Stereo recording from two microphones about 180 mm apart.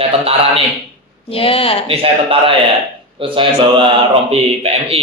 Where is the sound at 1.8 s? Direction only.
30° right (ahead or behind).